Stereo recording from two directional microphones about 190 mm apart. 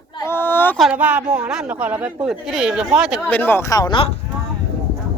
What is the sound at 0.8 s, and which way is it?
Speech, 5° right (ahead or behind).